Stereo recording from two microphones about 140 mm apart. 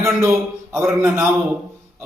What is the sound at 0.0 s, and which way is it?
A man's voice, 20° right (ahead or behind).